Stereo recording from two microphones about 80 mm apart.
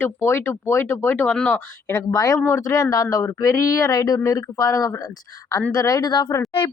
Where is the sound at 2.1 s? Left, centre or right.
Left.